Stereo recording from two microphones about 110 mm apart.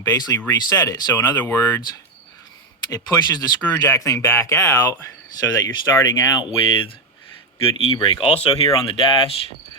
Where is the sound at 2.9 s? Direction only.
35° left (ahead or behind).